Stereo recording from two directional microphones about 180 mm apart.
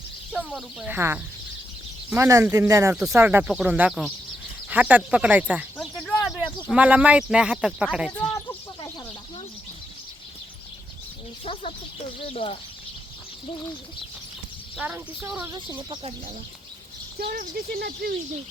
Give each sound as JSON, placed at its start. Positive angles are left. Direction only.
{"t": 0.3, "sound": "speech", "side_deg": 0}
{"t": 5.7, "sound": "speech", "side_deg": 5}
{"t": 12.2, "sound": "speech", "side_deg": 35}
{"t": 14.8, "sound": "speech", "side_deg": -10}
{"t": 17.2, "sound": "speech", "side_deg": -55}